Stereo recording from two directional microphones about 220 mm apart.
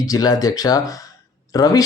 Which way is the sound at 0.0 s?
15° left (ahead or behind).